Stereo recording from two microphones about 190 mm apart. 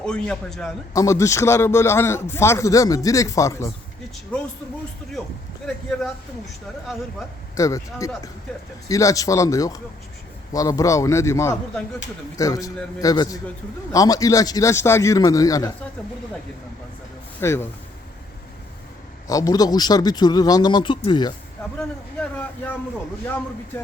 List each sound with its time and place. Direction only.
0.0 s a man's voice: 5° left (ahead or behind)
0.9 s a man's voice: 15° left (ahead or behind)
7.5 s a man's voice: 15° left (ahead or behind)
17.4 s a man's voice: 15° left (ahead or behind)
19.3 s a man's voice: 20° left (ahead or behind)
21.8 s a man's voice: 5° left (ahead or behind)